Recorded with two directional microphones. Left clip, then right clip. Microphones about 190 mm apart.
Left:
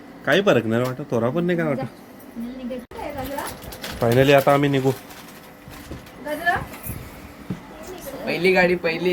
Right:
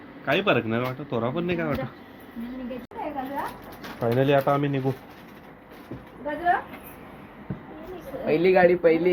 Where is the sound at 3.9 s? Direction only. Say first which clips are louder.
Left 6 dB; 35° left (ahead or behind).